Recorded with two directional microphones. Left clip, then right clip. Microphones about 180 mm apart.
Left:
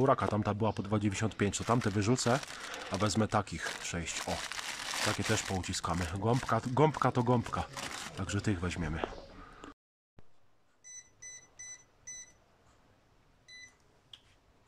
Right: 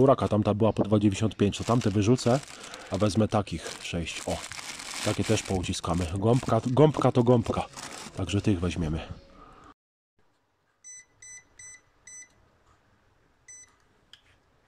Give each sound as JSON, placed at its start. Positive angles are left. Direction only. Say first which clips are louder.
{"t": 0.0, "sound": "speech", "louder": "right 7 dB", "side_deg": -15}